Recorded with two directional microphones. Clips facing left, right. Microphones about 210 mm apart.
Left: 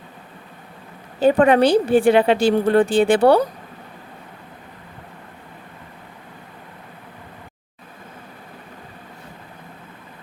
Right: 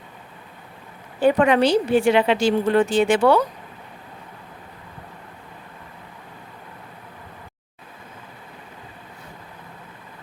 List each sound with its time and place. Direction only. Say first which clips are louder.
1.2 s speech: left 2 dB; 35° left (ahead or behind)
1.5 s a woman's voice: left 3 dB; 55° left (ahead or behind)
2.7 s speech: left 2 dB; 35° left (ahead or behind)